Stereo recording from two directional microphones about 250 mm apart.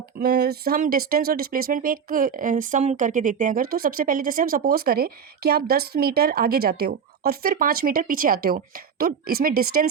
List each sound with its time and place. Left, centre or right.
0.2 s speech: right